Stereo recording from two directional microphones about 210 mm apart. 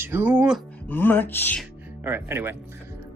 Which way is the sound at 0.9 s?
10° left (ahead or behind).